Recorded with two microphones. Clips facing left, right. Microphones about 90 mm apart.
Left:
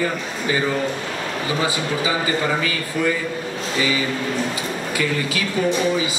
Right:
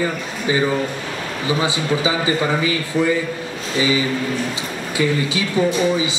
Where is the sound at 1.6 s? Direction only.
20° right (ahead or behind).